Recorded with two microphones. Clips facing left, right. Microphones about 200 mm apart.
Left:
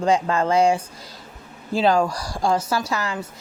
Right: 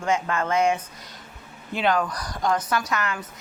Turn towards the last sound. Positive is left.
turn(degrees=30)  # may be behind; listen again after turning